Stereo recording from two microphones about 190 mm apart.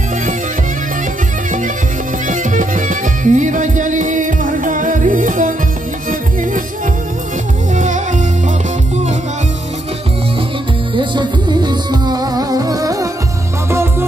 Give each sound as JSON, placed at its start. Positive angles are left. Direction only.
{"t": 2.2, "sound": "music", "side_deg": -45}
{"t": 7.7, "sound": "music", "side_deg": -40}
{"t": 11.0, "sound": "music", "side_deg": -25}